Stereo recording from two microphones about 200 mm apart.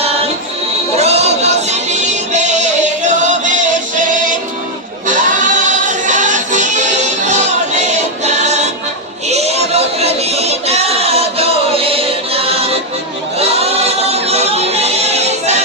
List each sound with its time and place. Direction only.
0.9 s music: 30° right (ahead or behind)
5.0 s music: 40° right (ahead or behind)
9.3 s a sound: 30° right (ahead or behind)
13.5 s music: 30° right (ahead or behind)